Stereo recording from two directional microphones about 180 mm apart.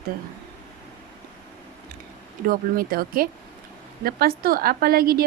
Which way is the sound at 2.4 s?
55° right (ahead or behind).